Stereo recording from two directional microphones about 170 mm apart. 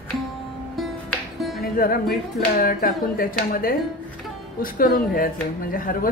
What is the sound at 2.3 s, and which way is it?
A woman's voice, 60° left (ahead or behind).